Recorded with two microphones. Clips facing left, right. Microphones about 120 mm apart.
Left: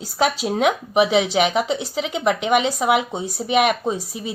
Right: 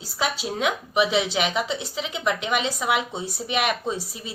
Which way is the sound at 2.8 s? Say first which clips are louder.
Left 6 dB; 25° left (ahead or behind).